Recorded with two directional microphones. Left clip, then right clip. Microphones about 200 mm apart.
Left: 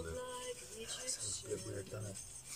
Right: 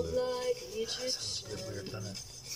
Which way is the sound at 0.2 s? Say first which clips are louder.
Right 12 dB; 30° right (ahead or behind).